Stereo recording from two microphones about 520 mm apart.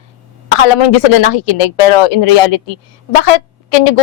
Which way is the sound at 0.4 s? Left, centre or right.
Left.